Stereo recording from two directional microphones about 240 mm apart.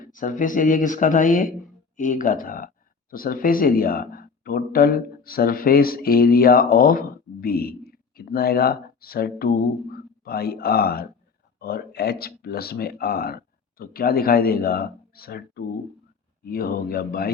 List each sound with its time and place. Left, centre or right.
0.0 s speech: left